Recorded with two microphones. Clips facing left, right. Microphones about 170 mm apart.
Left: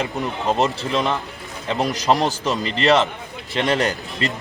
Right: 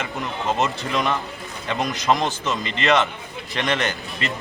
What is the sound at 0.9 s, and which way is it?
A man's voice, 25° left (ahead or behind).